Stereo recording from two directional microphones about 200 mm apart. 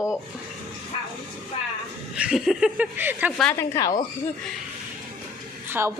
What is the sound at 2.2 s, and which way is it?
Speech, 5° right (ahead or behind).